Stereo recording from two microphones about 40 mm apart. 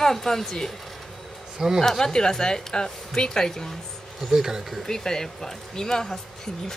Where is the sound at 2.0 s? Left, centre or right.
Centre.